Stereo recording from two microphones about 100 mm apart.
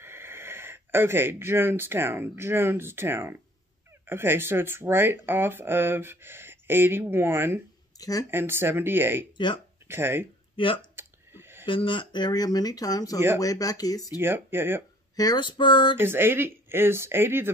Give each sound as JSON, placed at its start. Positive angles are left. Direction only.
{"t": 0.0, "sound": "speech", "side_deg": -25}
{"t": 8.0, "sound": "speech", "side_deg": 35}
{"t": 8.3, "sound": "speech", "side_deg": -25}
{"t": 10.5, "sound": "a sound", "side_deg": 60}
{"t": 11.0, "sound": "a sound", "side_deg": -25}
{"t": 11.6, "sound": "speech", "side_deg": 60}
{"t": 14.1, "sound": "speech", "side_deg": -25}
{"t": 15.1, "sound": "a sound", "side_deg": 45}
{"t": 16.0, "sound": "speech", "side_deg": -20}